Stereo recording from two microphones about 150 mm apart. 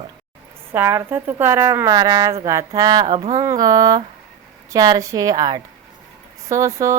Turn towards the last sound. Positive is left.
turn(degrees=-20)  # may be behind; listen again after turning